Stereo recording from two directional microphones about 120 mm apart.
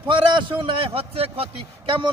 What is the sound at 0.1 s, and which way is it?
A man's voice, 45° right (ahead or behind).